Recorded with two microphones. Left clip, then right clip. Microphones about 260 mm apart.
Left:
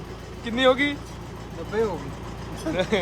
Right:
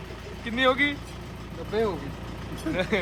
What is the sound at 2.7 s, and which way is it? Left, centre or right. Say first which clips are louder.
Speech: left 3 dB; centre.